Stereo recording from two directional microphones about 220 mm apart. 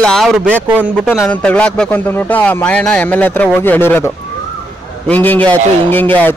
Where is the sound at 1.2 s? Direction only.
5° left (ahead or behind).